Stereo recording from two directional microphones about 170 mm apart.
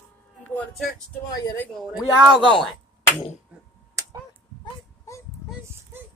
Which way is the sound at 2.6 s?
Centre (ahead or behind).